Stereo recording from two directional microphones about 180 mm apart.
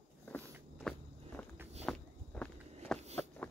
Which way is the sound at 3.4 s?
10° left (ahead or behind).